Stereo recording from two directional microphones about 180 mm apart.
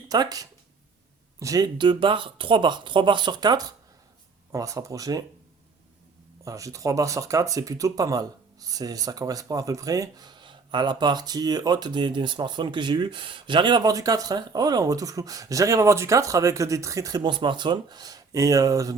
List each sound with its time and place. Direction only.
0.1 s speech: 20° right (ahead or behind)
6.4 s speech: 20° right (ahead or behind)